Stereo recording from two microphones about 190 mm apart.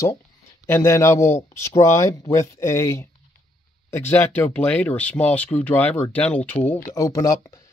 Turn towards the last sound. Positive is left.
turn(degrees=15)  # may be behind; listen again after turning